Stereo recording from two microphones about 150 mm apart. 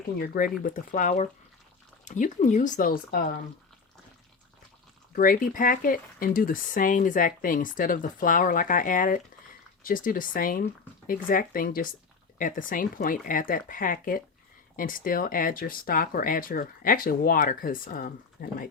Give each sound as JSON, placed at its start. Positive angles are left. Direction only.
{"t": 0.2, "sound": "speech", "side_deg": 70}
{"t": 5.1, "sound": "speech", "side_deg": 65}